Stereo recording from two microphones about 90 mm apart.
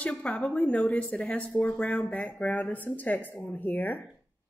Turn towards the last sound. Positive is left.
turn(degrees=20)  # may be behind; listen again after turning